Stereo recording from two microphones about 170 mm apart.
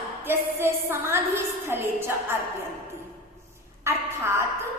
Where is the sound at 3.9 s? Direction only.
15° right (ahead or behind).